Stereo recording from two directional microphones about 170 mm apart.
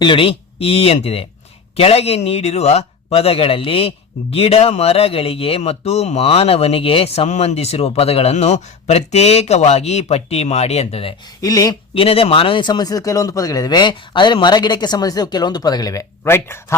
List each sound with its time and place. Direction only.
0.0 s a man's voice: 30° left (ahead or behind)
11.3 s speech: 20° left (ahead or behind)
12.0 s speech: 35° left (ahead or behind); by 16.7 s 15° left (ahead or behind)